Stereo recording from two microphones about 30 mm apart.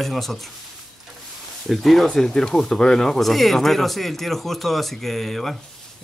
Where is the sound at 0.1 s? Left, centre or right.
Centre.